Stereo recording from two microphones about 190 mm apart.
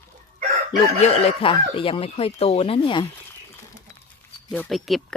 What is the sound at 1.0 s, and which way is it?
Speech, 30° left (ahead or behind).